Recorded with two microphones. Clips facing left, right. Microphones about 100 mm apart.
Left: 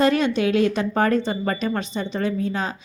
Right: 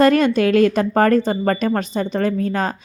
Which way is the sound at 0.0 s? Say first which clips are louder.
Right 5 dB; 50° right (ahead or behind).